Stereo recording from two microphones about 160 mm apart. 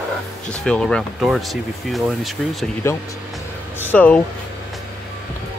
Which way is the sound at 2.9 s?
15° left (ahead or behind).